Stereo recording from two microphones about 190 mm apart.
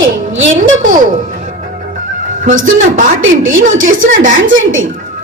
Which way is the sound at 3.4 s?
90° right.